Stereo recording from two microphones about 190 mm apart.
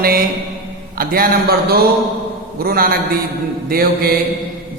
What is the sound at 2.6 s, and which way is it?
A man's voice, 50° right (ahead or behind).